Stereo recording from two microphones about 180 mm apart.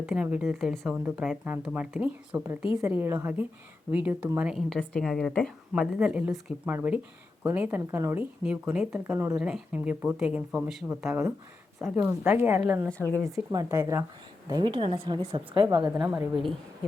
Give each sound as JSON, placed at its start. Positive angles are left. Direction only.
{"t": 0.0, "sound": "a woman's voice", "side_deg": -5}
{"t": 14.5, "sound": "a woman's voice", "side_deg": -25}
{"t": 16.0, "sound": "a woman's voice", "side_deg": -5}